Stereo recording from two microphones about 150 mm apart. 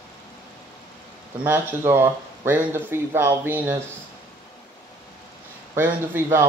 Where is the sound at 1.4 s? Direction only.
15° right (ahead or behind).